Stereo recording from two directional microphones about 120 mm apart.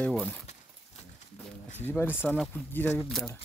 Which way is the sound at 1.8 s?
15° left (ahead or behind).